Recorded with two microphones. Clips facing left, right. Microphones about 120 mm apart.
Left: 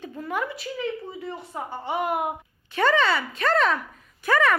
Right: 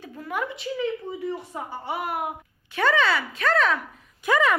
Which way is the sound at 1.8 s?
5° right (ahead or behind).